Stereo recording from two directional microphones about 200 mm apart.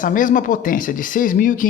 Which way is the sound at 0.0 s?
40° left (ahead or behind).